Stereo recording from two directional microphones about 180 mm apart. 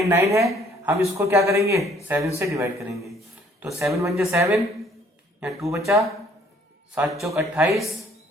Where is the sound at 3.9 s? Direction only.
15° right (ahead or behind).